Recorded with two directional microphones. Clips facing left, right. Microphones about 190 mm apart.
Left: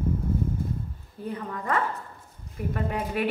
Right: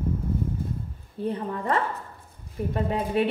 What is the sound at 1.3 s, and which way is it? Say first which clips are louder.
A woman's voice: right 1 dB; 30° right (ahead or behind).